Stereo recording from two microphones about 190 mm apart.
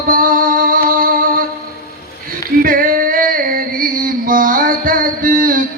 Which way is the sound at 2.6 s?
45° right (ahead or behind).